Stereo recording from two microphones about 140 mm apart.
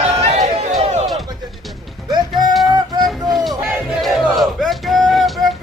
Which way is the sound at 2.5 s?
Centre (ahead or behind).